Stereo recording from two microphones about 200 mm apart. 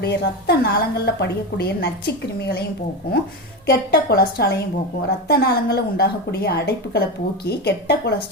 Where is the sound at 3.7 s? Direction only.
50° left (ahead or behind).